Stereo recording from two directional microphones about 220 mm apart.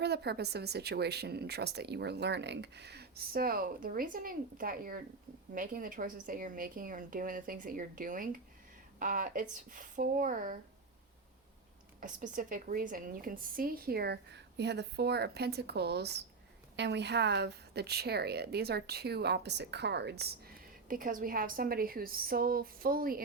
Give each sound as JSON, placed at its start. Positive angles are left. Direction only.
{"t": 0.0, "sound": "a woman's voice", "side_deg": -50}
{"t": 11.9, "sound": "a woman's voice", "side_deg": -35}